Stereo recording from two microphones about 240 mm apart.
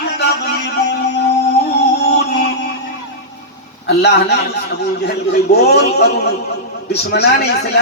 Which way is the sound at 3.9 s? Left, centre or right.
Left.